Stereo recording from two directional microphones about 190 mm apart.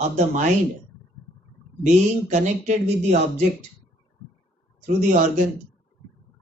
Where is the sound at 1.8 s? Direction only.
40° right (ahead or behind).